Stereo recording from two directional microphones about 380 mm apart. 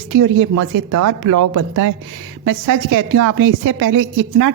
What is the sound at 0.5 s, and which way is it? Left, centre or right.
Speech, right.